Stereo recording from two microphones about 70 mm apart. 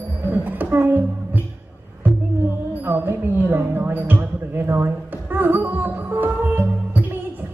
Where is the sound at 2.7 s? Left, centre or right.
Right.